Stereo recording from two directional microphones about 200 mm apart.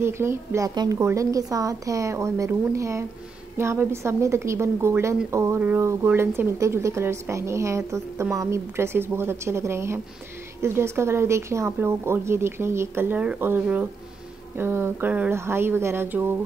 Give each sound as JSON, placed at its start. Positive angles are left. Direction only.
{"t": 0.0, "sound": "a woman's voice", "side_deg": -10}